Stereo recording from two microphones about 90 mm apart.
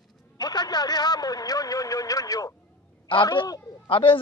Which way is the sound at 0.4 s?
50° left (ahead or behind).